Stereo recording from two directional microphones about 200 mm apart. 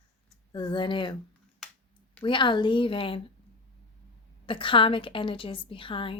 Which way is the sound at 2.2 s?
25° left (ahead or behind).